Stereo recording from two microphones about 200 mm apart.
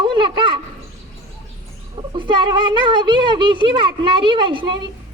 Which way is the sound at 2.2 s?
25° right (ahead or behind).